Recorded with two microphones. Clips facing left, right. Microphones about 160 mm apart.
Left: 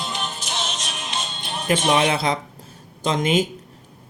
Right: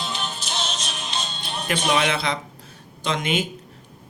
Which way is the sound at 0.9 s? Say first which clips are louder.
Left 1 dB; 5° left (ahead or behind).